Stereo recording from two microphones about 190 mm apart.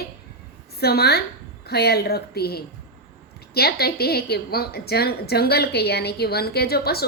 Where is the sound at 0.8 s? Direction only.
55° left (ahead or behind).